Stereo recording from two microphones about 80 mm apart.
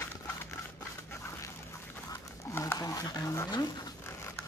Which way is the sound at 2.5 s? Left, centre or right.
Left.